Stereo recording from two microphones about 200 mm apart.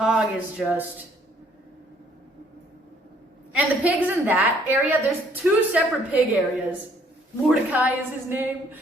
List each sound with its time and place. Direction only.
0.0 s speech: 5° right (ahead or behind)
3.5 s a woman's voice: 5° right (ahead or behind)